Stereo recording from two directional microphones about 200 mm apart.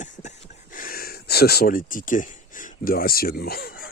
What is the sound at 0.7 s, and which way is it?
Speech, 45° left (ahead or behind).